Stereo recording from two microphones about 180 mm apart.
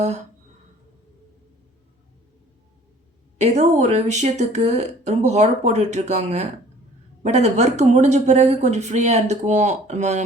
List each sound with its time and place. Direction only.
3.3 s speech: 40° right (ahead or behind)